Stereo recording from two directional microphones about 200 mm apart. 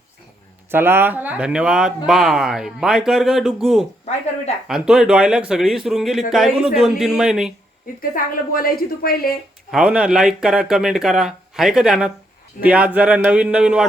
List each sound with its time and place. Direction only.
0.7 s speech: 10° right (ahead or behind)
8.1 s a woman's voice: 45° left (ahead or behind)
9.7 s speech: 5° right (ahead or behind)